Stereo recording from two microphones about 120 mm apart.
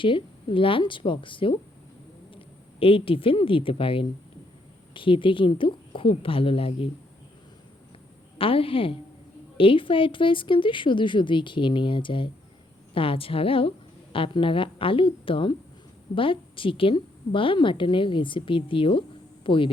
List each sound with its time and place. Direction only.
0.0 s a woman's voice: 45° left (ahead or behind)
8.4 s a woman's voice: 50° left (ahead or behind)